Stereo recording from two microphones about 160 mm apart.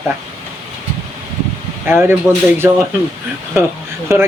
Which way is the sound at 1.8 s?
15° right (ahead or behind).